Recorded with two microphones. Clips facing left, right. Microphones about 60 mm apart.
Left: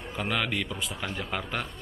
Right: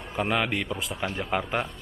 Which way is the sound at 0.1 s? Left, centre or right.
Centre.